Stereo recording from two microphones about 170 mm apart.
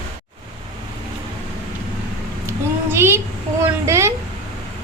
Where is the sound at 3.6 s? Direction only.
15° right (ahead or behind).